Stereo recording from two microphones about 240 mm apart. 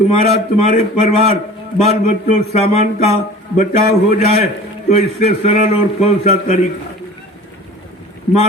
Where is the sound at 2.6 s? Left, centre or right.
Left.